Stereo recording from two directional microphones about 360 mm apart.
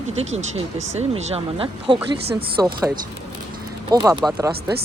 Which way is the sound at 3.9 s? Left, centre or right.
Centre.